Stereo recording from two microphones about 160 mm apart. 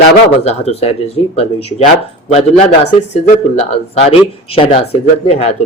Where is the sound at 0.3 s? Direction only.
40° left (ahead or behind).